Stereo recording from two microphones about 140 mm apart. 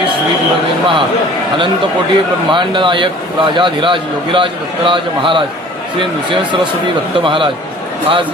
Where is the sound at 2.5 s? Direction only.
35° right (ahead or behind).